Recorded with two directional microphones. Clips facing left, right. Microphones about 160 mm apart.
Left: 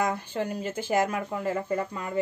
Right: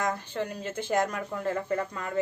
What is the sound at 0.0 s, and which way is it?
A woman's voice, 10° left (ahead or behind).